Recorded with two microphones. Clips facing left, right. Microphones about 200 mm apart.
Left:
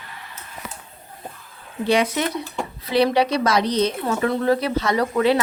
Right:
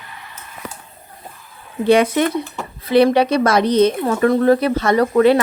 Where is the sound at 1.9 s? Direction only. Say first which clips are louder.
Right 6 dB; 55° right (ahead or behind).